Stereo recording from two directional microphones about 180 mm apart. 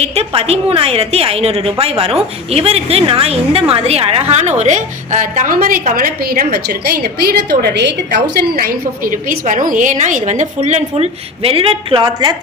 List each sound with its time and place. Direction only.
0.0 s a woman's voice: 35° right (ahead or behind)